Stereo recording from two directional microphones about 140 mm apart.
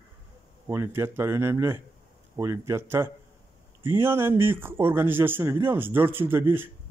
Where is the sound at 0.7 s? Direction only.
20° right (ahead or behind).